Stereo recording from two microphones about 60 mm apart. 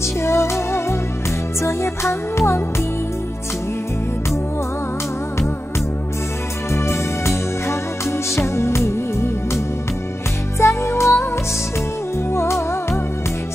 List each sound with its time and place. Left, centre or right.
0.2 s music: left
6.7 s music: left
10.6 s music: left
12.3 s music: left